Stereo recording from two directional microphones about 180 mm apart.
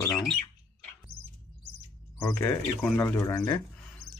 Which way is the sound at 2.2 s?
15° left (ahead or behind).